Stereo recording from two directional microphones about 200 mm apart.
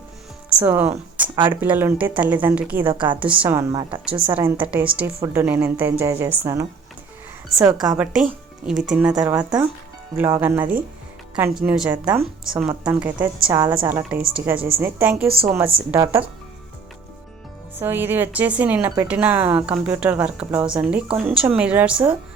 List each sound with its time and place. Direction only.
0.6 s a woman's voice: 10° right (ahead or behind)
3.7 s speech: 25° right (ahead or behind)
4.0 s a woman's voice: 5° right (ahead or behind)
7.5 s a woman's voice: centre (ahead or behind)
15.3 s speech: 30° right (ahead or behind)
15.9 s a woman's voice: 10° right (ahead or behind)
17.7 s a woman's voice: 10° right (ahead or behind)